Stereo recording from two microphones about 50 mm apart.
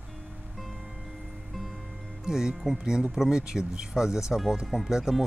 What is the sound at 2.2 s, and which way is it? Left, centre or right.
Speech, centre.